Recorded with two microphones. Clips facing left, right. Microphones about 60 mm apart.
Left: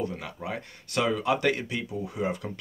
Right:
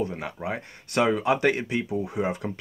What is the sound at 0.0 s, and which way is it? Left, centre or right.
Speech, right.